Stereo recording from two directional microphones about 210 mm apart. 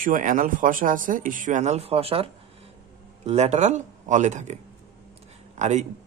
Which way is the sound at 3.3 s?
30° right (ahead or behind).